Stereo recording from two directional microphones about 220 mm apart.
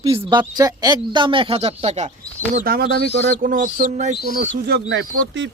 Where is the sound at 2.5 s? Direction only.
40° right (ahead or behind).